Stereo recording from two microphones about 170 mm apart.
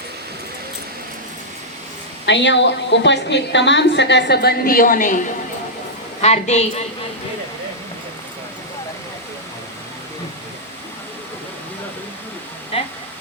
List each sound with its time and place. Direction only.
2.2 s a woman's voice: 90° left; by 5.2 s 50° left (ahead or behind)
6.2 s a woman's voice: 40° left (ahead or behind)
12.7 s a sound: 35° left (ahead or behind)